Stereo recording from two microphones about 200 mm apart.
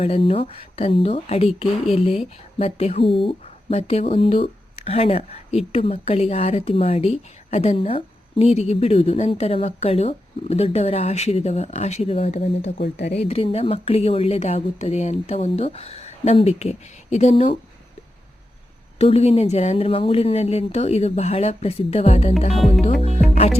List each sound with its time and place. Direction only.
0.0 s a woman's voice: 30° left (ahead or behind)
12.8 s speech: 55° left (ahead or behind)
13.1 s speech: 30° left (ahead or behind)
18.9 s speech: 30° left (ahead or behind)